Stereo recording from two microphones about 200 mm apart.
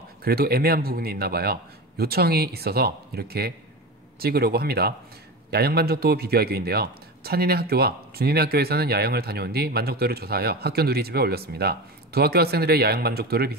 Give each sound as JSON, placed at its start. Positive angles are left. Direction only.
{"t": 0.2, "sound": "a man's voice", "side_deg": -50}